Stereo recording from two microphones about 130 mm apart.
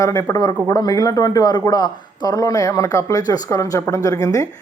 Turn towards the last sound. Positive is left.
turn(degrees=25)  # may be behind; listen again after turning